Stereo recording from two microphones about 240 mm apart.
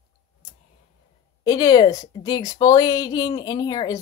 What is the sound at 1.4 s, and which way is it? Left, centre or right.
A woman's voice, centre.